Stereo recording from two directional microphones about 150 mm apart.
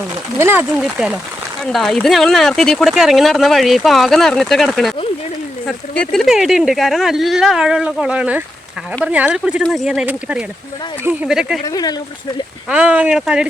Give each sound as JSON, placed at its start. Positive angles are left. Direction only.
{"t": 0.3, "sound": "speech", "side_deg": -15}
{"t": 0.8, "sound": "speech", "side_deg": -5}
{"t": 11.6, "sound": "speech", "side_deg": 25}
{"t": 12.6, "sound": "speech", "side_deg": -10}